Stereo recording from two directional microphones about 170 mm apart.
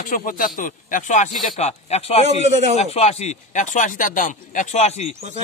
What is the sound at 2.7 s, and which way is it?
Speech, 40° left (ahead or behind).